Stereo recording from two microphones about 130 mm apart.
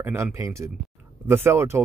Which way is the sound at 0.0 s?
20° right (ahead or behind).